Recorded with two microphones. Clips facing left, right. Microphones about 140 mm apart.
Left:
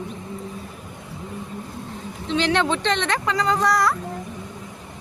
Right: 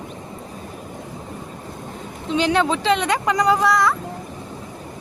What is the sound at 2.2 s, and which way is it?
Speech, 10° right (ahead or behind).